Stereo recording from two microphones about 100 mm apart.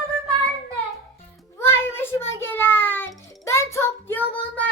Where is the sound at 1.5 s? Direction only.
25° left (ahead or behind).